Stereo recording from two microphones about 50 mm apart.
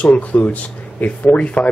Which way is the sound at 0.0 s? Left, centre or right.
Left.